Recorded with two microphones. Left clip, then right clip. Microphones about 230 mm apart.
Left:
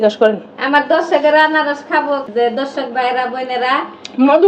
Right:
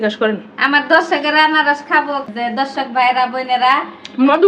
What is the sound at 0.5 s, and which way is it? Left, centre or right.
Speech, right.